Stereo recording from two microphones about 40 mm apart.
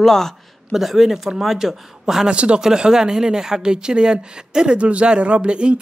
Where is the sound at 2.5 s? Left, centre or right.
Centre.